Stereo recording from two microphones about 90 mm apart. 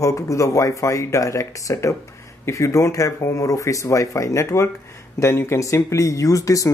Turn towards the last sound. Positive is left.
turn(degrees=40)  # may be behind; listen again after turning